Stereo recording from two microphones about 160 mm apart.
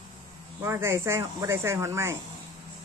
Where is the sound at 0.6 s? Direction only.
15° right (ahead or behind).